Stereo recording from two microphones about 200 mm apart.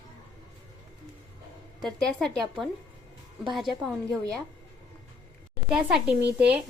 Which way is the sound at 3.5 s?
Centre (ahead or behind).